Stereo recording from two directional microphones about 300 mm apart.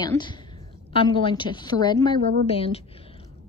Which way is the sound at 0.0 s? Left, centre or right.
Centre.